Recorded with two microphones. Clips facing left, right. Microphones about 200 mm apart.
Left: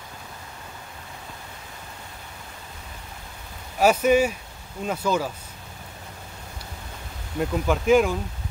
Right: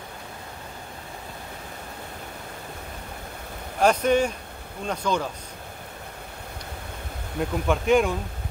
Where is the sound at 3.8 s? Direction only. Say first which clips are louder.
Left 2 dB; 5° left (ahead or behind).